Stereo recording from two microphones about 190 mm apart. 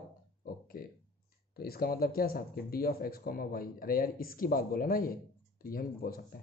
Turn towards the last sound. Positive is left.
turn(degrees=50)  # may be behind; listen again after turning